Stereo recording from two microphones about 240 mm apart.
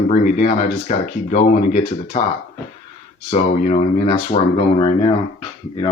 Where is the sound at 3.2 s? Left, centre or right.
Left.